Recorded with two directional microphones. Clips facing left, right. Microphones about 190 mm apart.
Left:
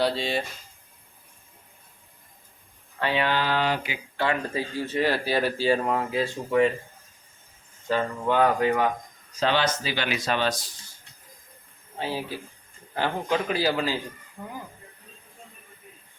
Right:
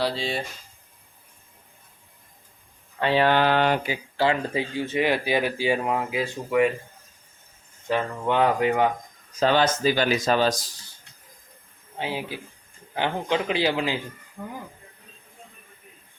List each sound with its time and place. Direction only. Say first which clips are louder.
0.0 s speech: left 1 dB; centre (ahead or behind)
3.2 s speech: right 6 dB; 55° right (ahead or behind)
3.8 s speech: right 4 dB; 30° right (ahead or behind)
4.9 s speech: right 1 dB; 15° right (ahead or behind)
7.9 s speech: even; 20° right (ahead or behind)
9.4 s speech: right 4 dB; 45° right (ahead or behind)
11.9 s speech: even; 15° right (ahead or behind)